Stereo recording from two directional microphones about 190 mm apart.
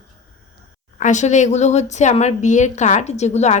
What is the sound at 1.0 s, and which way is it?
A woman's voice, 40° left (ahead or behind).